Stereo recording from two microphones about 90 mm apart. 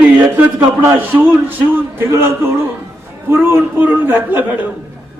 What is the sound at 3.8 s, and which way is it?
Speech, 20° right (ahead or behind).